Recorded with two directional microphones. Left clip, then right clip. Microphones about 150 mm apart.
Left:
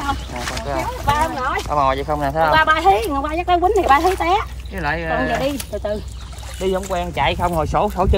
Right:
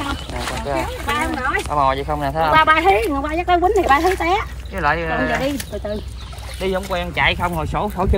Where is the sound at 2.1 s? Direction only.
40° left (ahead or behind).